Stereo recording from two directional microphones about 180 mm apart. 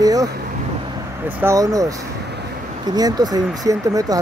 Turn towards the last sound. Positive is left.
turn(degrees=-20)  # may be behind; listen again after turning